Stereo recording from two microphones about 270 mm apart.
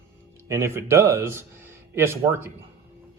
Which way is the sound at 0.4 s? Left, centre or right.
Centre.